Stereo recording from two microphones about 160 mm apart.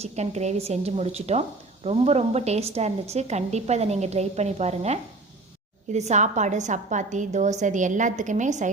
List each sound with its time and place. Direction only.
0.0 s a woman's voice: 45° right (ahead or behind)